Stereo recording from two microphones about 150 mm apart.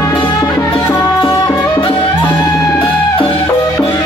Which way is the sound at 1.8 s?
35° left (ahead or behind).